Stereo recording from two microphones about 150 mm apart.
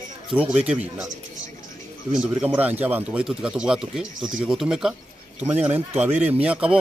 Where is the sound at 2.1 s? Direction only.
10° right (ahead or behind).